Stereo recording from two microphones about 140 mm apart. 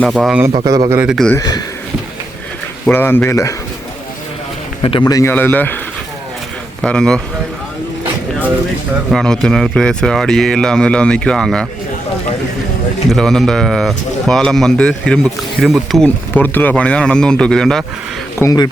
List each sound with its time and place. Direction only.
0.0 s speech: centre (ahead or behind)
0.6 s a man's voice: 25° right (ahead or behind)
1.0 s speech: centre (ahead or behind)
1.4 s speech: 30° left (ahead or behind)
2.9 s speech: 15° left (ahead or behind)
4.8 s a man's voice: 35° left (ahead or behind)
5.3 s speech: 15° left (ahead or behind)
6.8 s speech: 5° left (ahead or behind)
9.1 s speech: 5° left (ahead or behind)
13.1 s speech: 5° left (ahead or behind)
16.0 s speech: 10° left (ahead or behind)
18.3 s speech: 25° left (ahead or behind)